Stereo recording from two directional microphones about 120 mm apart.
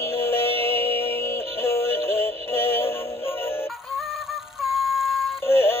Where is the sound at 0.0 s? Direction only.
20° left (ahead or behind).